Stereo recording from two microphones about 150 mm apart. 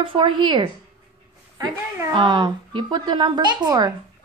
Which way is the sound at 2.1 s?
30° right (ahead or behind).